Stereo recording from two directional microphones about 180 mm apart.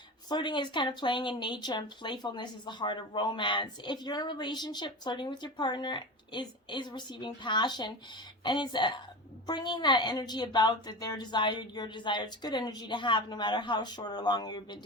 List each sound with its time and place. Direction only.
0.3 s speech: 25° left (ahead or behind)